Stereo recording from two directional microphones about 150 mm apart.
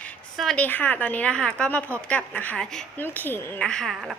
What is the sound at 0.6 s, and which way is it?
A woman's voice, 10° left (ahead or behind).